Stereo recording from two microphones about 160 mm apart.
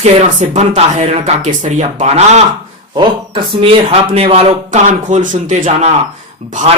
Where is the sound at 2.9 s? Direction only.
30° right (ahead or behind).